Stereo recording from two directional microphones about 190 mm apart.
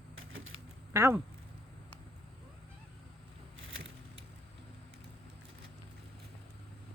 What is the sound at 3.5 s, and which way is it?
Vehicle, 90° right.